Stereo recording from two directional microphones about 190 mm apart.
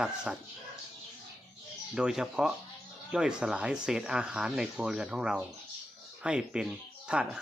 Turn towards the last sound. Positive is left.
turn(degrees=-5)  # may be behind; listen again after turning